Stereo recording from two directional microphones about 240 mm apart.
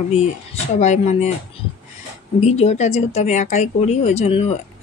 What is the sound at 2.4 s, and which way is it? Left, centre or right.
Speech, left.